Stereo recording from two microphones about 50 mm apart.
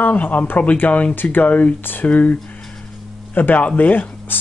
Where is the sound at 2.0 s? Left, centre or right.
Left.